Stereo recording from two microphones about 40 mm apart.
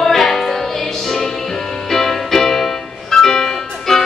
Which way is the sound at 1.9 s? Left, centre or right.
Centre.